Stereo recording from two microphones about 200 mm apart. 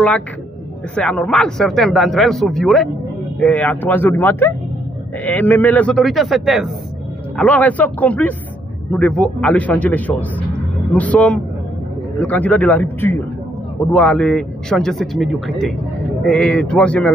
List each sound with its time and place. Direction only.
0.9 s speech: 5° left (ahead or behind)